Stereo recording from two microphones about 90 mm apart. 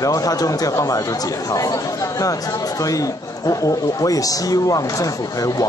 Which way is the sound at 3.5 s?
40° left (ahead or behind).